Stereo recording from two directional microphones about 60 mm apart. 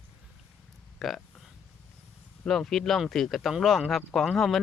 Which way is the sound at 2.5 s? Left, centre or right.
Centre.